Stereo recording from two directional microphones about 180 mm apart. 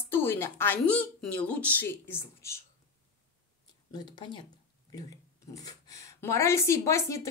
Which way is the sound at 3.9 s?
25° left (ahead or behind).